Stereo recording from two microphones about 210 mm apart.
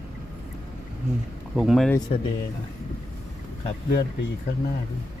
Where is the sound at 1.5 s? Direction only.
Centre (ahead or behind).